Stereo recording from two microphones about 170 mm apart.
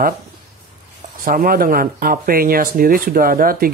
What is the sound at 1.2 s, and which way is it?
Speech, 55° right (ahead or behind).